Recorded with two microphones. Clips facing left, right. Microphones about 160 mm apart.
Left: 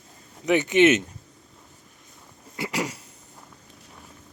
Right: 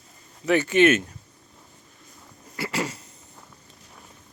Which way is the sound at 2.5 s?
15° left (ahead or behind).